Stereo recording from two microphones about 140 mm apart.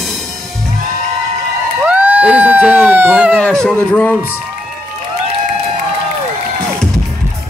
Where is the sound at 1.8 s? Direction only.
10° right (ahead or behind).